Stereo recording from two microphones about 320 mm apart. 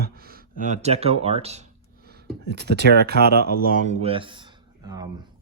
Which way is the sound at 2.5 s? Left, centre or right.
Right.